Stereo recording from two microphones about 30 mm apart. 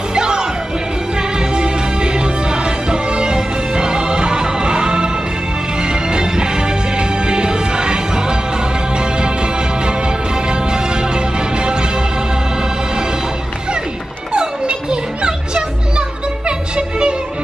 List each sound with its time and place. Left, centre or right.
0.1 s music: right
14.3 s music: right